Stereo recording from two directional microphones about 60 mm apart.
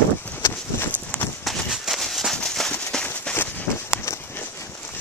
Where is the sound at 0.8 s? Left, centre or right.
Left.